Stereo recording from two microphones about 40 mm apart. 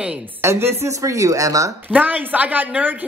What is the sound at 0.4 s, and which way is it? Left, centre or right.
Speech, right.